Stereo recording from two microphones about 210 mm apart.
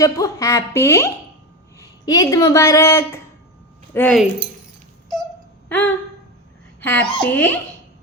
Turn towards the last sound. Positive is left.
turn(degrees=10)  # may be behind; listen again after turning